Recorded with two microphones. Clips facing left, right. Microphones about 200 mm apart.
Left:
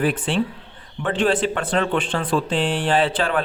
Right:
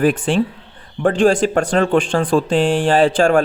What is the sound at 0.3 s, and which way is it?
Speech, 45° right (ahead or behind).